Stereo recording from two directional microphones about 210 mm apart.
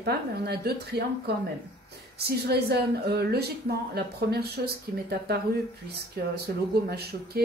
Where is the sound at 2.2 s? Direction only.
50° right (ahead or behind).